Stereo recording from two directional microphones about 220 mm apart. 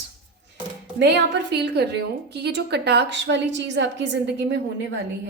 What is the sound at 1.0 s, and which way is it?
A woman's voice, 50° right (ahead or behind).